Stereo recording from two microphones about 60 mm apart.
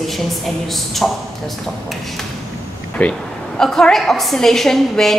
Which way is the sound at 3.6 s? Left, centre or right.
Centre.